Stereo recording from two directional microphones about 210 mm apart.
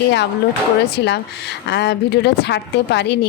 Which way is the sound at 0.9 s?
50° left (ahead or behind).